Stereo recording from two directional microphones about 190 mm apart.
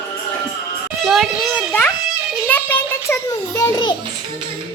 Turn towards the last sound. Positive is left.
turn(degrees=20)  # may be behind; listen again after turning